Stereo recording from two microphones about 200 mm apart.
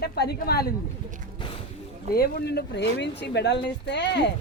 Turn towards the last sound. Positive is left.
turn(degrees=60)  # may be behind; listen again after turning